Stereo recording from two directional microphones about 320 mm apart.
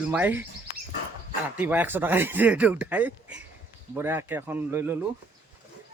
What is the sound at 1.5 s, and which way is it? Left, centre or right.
Speech, centre.